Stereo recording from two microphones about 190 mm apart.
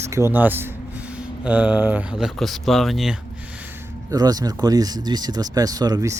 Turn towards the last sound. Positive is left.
turn(degrees=-20)  # may be behind; listen again after turning